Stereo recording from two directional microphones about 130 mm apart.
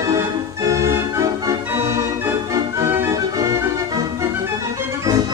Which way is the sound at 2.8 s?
25° right (ahead or behind).